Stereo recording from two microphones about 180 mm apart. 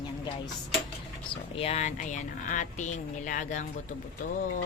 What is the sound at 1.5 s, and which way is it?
Speech, 35° left (ahead or behind).